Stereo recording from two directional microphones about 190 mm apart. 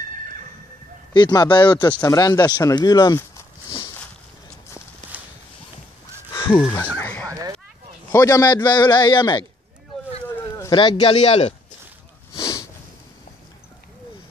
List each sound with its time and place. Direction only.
1.1 s speech: 20° left (ahead or behind)
3.6 s a sound: 25° left (ahead or behind)
5.0 s a sound: 40° right (ahead or behind)
6.3 s fowl: 10° left (ahead or behind)
6.6 s speech: 10° left (ahead or behind)
7.2 s a sound: 20° right (ahead or behind)
8.1 s speech: 20° left (ahead or behind)
10.6 s speech: 25° left (ahead or behind)
12.4 s sniff: 20° left (ahead or behind)